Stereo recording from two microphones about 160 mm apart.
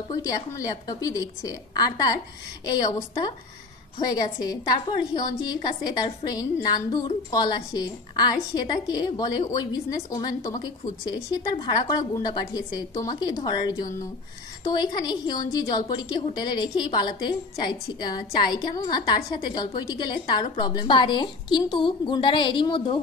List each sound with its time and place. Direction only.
0.1 s a woman's voice: 20° left (ahead or behind)
4.0 s a woman's voice: 25° left (ahead or behind)
11.5 s a woman's voice: 25° left (ahead or behind)